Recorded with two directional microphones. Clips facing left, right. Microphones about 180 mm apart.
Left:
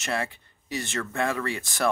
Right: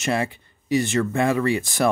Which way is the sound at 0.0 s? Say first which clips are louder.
Right 6 dB; 15° right (ahead or behind).